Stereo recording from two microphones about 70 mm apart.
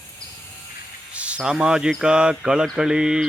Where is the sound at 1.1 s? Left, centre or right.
Centre.